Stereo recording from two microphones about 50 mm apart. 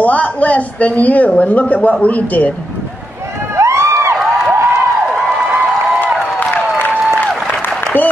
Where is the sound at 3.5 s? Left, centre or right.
Right.